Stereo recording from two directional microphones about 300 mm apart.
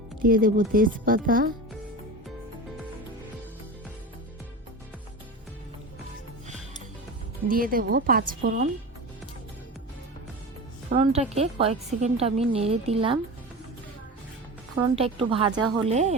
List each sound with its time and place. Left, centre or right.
0.2 s a woman's voice: right
7.4 s a woman's voice: right
11.0 s a woman's voice: right
14.9 s a woman's voice: centre